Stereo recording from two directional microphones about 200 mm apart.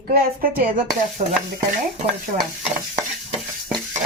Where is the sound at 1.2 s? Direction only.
30° right (ahead or behind).